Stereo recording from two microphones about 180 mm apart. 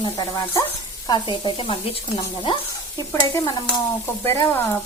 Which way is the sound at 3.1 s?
15° left (ahead or behind).